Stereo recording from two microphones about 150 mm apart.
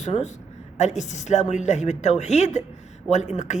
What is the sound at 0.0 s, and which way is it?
A man's voice, 50° left (ahead or behind).